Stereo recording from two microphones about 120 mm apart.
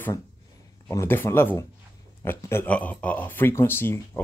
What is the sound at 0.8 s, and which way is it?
Speech, 20° left (ahead or behind).